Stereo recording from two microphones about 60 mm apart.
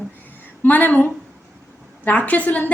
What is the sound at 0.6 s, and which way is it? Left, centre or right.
A woman's voice, left.